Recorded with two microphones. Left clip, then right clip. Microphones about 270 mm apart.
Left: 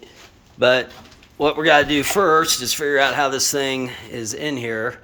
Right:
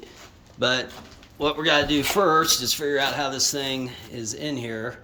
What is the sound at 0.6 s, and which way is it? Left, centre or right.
A man's voice, centre.